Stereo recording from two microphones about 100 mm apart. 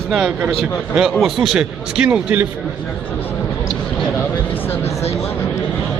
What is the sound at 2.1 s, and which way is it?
Speech, 15° right (ahead or behind).